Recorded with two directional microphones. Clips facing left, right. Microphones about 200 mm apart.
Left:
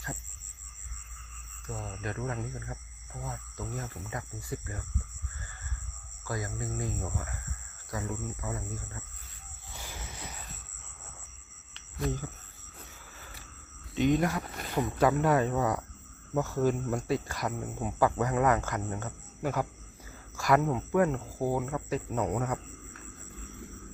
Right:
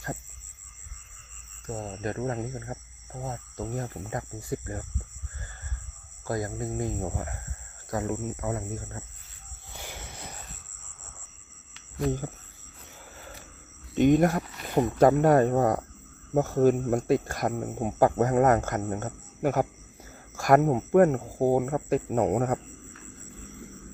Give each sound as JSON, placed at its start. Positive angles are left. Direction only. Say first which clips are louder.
{"t": 1.7, "sound": "speech", "louder": "right 5 dB", "side_deg": -30}
{"t": 6.2, "sound": "speech", "louder": "right 6 dB", "side_deg": -45}
{"t": 7.9, "sound": "speech", "louder": "right 6 dB", "side_deg": -55}
{"t": 9.8, "sound": "a sound", "louder": "right 3 dB", "side_deg": -65}
{"t": 13.9, "sound": "speech", "louder": "right 6 dB", "side_deg": -50}